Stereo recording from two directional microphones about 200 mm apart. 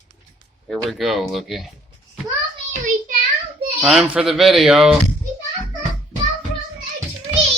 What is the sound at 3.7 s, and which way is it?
Speech, 5° right (ahead or behind).